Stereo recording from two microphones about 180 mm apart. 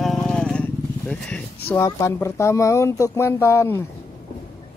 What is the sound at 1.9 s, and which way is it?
Speech, 15° left (ahead or behind).